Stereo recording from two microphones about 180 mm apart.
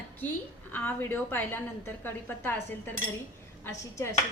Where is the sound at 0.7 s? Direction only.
10° left (ahead or behind).